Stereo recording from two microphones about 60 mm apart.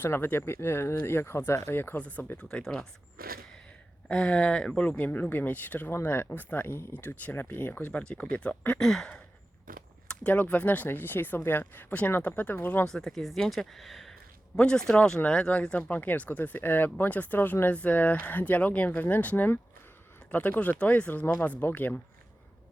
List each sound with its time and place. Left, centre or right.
0.0 s speech: left
2.3 s speech: centre
4.1 s speech: left
4.8 s speech: left
7.8 s speech: left
8.8 s speech: centre
10.3 s speech: left
12.8 s speech: centre
14.6 s speech: centre
15.9 s speech: left